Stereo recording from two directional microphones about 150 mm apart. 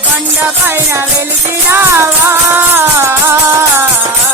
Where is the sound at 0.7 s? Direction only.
15° right (ahead or behind).